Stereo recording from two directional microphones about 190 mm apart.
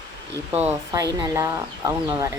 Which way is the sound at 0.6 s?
10° right (ahead or behind).